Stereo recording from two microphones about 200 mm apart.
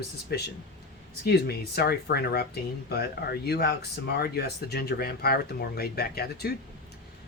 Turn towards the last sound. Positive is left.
turn(degrees=50)  # may be behind; listen again after turning